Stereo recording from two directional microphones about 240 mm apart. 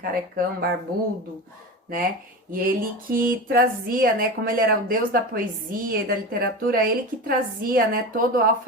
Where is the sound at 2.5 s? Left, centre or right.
Right.